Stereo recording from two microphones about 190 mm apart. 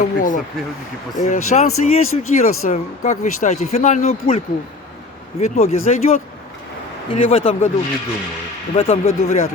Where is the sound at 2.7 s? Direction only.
35° left (ahead or behind).